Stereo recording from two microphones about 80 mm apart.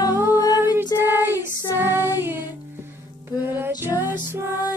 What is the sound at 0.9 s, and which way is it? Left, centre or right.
Child singing, right.